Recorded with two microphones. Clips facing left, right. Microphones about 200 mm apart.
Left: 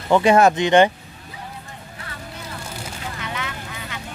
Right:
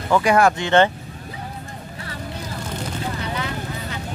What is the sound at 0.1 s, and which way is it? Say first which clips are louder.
Speech: left 2 dB; 25° left (ahead or behind).